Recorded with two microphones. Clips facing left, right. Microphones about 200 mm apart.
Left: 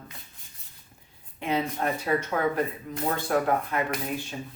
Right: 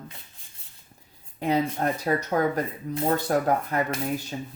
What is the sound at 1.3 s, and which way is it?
Speech, 40° right (ahead or behind).